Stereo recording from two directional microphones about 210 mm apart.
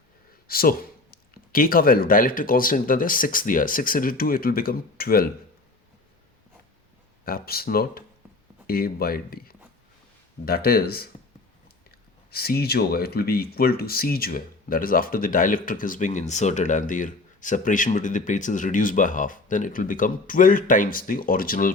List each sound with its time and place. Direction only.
0.4 s speech: 45° left (ahead or behind)
7.3 s speech: 45° left (ahead or behind)
12.3 s speech: 45° left (ahead or behind)